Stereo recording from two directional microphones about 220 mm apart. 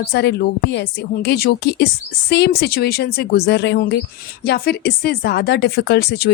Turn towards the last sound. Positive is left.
turn(degrees=45)  # may be behind; listen again after turning